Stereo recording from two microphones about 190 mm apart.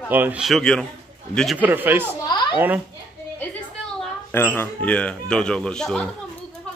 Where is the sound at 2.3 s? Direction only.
25° left (ahead or behind).